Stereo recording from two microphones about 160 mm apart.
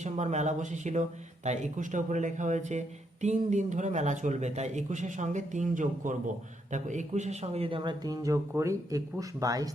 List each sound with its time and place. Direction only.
0.0 s speech: 45° right (ahead or behind); by 9.6 s 20° right (ahead or behind)